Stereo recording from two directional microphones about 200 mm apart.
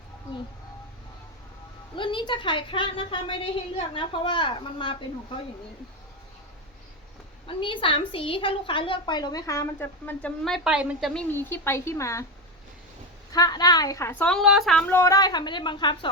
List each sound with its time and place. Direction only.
2.0 s a woman's voice: 25° left (ahead or behind)
7.4 s a woman's voice: 25° left (ahead or behind); by 11.1 s 5° right (ahead or behind)
11.1 s a woman's voice: 10° left (ahead or behind)
13.3 s a woman's voice: 20° left (ahead or behind)